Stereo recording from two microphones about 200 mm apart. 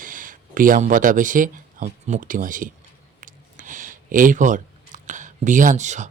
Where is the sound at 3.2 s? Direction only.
40° right (ahead or behind).